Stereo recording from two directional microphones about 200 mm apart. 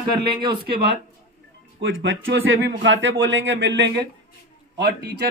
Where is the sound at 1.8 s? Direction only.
65° right (ahead or behind).